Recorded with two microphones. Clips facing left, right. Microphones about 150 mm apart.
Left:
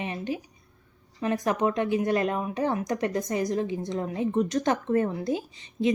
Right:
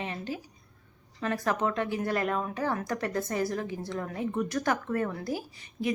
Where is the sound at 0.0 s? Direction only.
20° left (ahead or behind).